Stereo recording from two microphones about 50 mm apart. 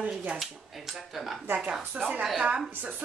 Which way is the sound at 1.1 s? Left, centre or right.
Centre.